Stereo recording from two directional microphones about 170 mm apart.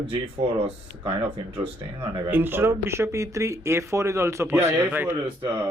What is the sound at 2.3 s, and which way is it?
Speech, 15° right (ahead or behind).